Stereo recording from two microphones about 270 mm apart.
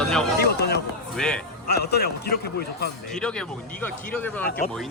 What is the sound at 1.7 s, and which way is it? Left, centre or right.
A man's voice, left.